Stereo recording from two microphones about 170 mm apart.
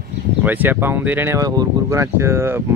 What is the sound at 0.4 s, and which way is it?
Speech, 10° right (ahead or behind).